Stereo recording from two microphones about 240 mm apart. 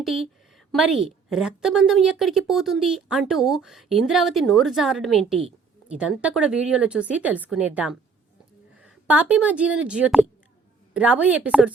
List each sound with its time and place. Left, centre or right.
0.0 s a woman's voice: centre